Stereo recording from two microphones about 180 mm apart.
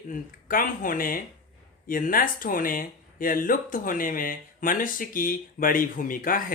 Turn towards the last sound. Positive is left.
turn(degrees=50)  # may be behind; listen again after turning